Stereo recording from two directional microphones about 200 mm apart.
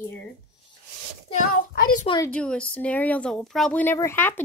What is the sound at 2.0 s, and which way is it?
Speech, 20° left (ahead or behind).